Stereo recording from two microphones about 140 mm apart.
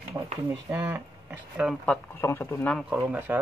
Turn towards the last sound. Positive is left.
turn(degrees=-10)  # may be behind; listen again after turning